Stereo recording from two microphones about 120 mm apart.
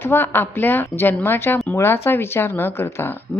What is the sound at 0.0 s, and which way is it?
A woman's voice, 20° left (ahead or behind).